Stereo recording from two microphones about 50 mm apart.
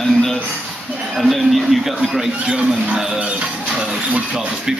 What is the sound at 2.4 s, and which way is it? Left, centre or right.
Speech, centre.